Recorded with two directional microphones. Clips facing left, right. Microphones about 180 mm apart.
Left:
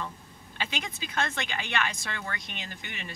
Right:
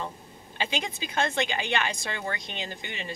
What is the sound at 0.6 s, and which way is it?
Speech, 30° right (ahead or behind).